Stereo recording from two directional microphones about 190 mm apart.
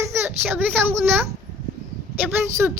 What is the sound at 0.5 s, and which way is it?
Speech, 10° right (ahead or behind).